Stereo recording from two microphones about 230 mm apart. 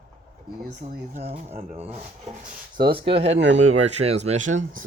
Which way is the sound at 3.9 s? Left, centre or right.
Right.